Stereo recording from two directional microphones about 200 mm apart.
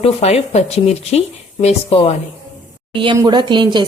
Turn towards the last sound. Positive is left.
turn(degrees=-20)  # may be behind; listen again after turning